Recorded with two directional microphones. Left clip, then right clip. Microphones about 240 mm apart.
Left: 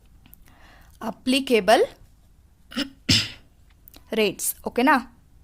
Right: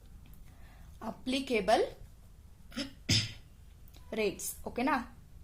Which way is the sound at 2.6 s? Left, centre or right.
Left.